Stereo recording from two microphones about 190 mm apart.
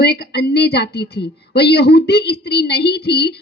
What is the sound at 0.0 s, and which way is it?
A woman's voice, 60° left (ahead or behind).